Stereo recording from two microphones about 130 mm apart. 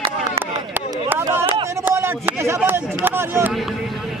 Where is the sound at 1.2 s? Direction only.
20° right (ahead or behind).